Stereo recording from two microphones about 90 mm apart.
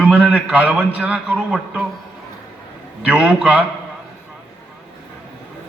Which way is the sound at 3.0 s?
15° right (ahead or behind).